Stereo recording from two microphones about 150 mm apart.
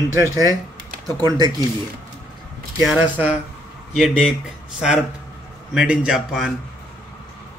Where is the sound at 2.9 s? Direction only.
10° right (ahead or behind).